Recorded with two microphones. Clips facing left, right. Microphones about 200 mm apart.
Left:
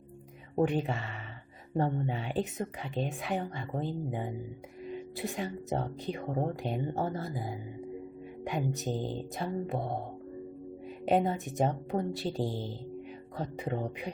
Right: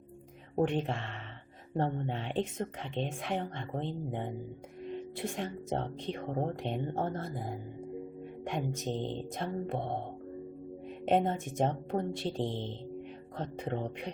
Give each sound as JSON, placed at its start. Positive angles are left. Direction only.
{"t": 0.5, "sound": "speech", "side_deg": 0}
{"t": 11.0, "sound": "speech", "side_deg": 0}